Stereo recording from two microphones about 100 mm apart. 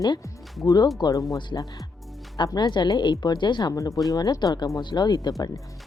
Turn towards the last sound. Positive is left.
turn(degrees=45)  # may be behind; listen again after turning